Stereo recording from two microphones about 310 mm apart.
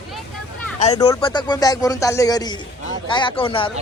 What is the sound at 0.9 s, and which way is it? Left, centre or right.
Speech, centre.